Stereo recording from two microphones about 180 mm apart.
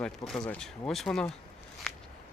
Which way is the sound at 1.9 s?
5° left (ahead or behind).